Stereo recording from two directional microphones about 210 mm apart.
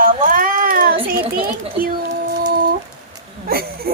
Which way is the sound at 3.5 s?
45° right (ahead or behind).